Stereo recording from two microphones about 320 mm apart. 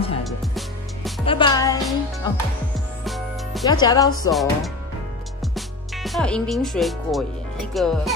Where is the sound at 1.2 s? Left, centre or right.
Centre.